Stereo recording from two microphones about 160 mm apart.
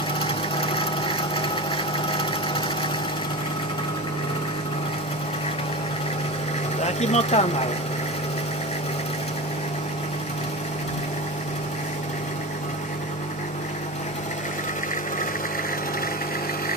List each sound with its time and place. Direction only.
0.2 s sewing machine: 35° left (ahead or behind)
2.0 s engine: 35° left (ahead or behind)
6.8 s speech: 45° left (ahead or behind)